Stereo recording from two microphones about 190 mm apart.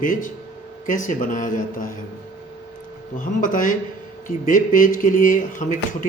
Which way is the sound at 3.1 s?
45° left (ahead or behind).